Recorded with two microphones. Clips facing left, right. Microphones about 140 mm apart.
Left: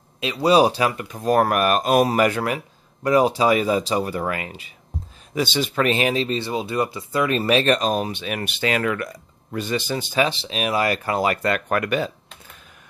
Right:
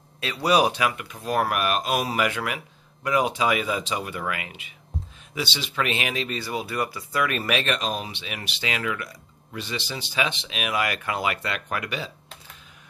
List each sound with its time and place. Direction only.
0.2 s speech: 20° left (ahead or behind)
5.3 s speech: 45° left (ahead or behind)